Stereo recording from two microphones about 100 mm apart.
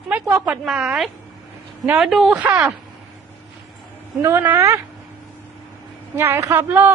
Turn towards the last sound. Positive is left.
turn(degrees=-20)  # may be behind; listen again after turning